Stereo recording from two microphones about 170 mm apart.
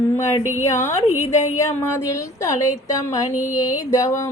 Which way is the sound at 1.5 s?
20° left (ahead or behind).